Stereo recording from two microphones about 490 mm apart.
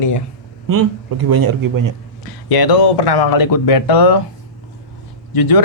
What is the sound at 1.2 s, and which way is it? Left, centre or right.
Speech, right.